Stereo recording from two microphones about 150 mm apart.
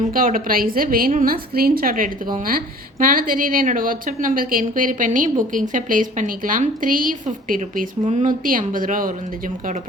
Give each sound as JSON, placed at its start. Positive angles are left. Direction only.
{"t": 0.0, "sound": "a woman's voice", "side_deg": -65}